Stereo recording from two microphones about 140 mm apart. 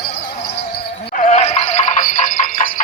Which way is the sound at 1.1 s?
60° left (ahead or behind).